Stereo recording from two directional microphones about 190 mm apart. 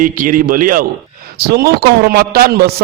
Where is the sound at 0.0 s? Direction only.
45° right (ahead or behind).